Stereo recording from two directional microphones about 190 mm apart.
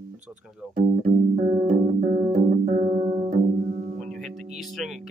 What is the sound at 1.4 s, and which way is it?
Music, 40° right (ahead or behind).